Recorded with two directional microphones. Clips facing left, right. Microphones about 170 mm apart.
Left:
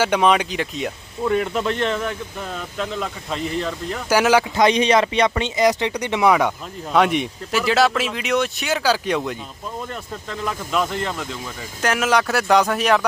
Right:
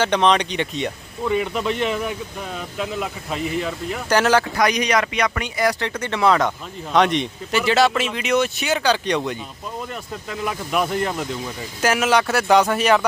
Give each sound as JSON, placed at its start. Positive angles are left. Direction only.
{"t": 0.0, "sound": "speech", "side_deg": 5}
{"t": 4.1, "sound": "speech", "side_deg": 10}
{"t": 9.9, "sound": "speech", "side_deg": -10}